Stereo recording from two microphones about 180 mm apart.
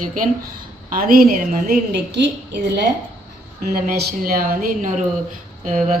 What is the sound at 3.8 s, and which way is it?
A woman's voice, 55° right (ahead or behind).